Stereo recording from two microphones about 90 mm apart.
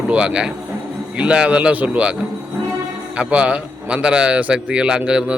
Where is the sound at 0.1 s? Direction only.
10° right (ahead or behind).